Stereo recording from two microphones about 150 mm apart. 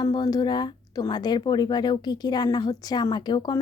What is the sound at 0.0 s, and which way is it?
Speech, 25° left (ahead or behind).